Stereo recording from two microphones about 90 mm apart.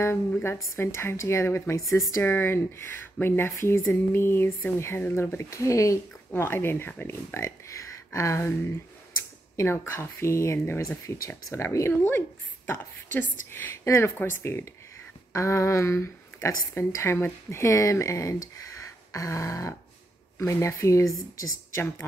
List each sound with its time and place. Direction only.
0.4 s speech: 30° left (ahead or behind)
7.3 s speech: 35° left (ahead or behind)
9.6 s speech: 30° left (ahead or behind)